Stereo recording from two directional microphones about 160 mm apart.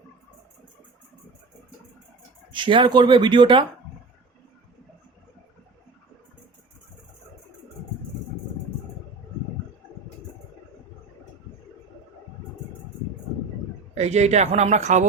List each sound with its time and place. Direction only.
2.5 s speech: 30° right (ahead or behind)
13.9 s speech: 45° right (ahead or behind)